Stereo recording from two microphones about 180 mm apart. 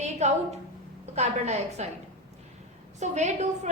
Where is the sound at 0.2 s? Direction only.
40° right (ahead or behind).